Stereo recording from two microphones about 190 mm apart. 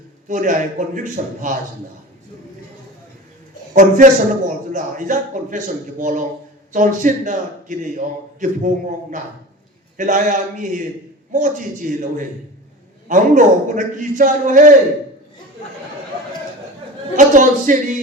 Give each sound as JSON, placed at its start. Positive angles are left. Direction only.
{"t": 0.3, "sound": "a man's voice", "side_deg": -40}
{"t": 3.8, "sound": "a man's voice", "side_deg": -40}
{"t": 17.2, "sound": "a man's voice", "side_deg": -40}